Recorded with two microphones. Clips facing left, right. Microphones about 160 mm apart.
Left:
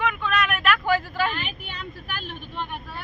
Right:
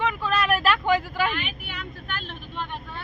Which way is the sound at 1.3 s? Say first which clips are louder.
Right 1 dB; 40° left (ahead or behind).